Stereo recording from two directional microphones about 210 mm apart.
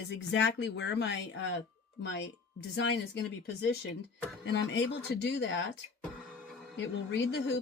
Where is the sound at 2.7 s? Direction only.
55° left (ahead or behind).